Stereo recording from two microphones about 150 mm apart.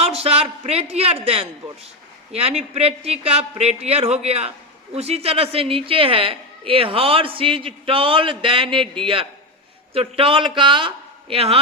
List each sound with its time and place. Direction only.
0.0 s a woman's voice: 45° right (ahead or behind)
9.9 s a man's voice: 40° right (ahead or behind)